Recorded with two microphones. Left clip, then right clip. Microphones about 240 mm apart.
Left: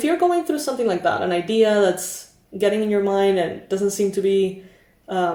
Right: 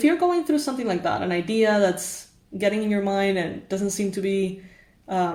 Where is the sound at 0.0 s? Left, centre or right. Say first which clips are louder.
Left 2 dB; right.